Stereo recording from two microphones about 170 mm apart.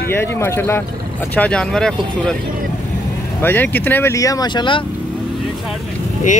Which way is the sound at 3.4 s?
10° left (ahead or behind).